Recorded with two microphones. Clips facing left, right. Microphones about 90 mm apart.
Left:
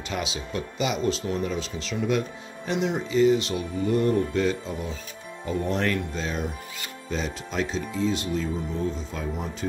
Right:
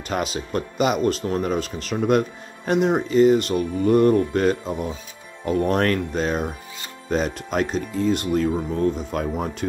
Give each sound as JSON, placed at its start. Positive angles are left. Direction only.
{"t": 0.1, "sound": "speech", "side_deg": -50}